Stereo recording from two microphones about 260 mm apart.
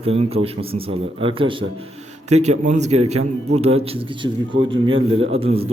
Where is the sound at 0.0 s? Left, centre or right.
Right.